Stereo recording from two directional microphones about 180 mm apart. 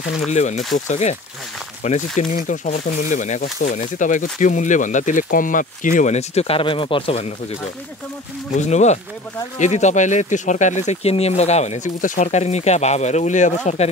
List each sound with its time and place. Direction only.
0.3 s speech: 40° left (ahead or behind)
8.5 s speech: 40° left (ahead or behind)